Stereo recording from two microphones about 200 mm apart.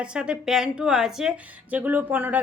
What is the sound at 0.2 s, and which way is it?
Speech, 5° right (ahead or behind).